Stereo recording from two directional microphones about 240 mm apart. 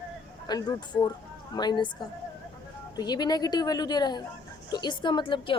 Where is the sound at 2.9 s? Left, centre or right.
Centre.